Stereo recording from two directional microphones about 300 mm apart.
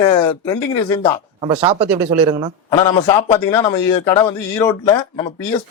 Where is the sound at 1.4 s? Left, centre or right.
Centre.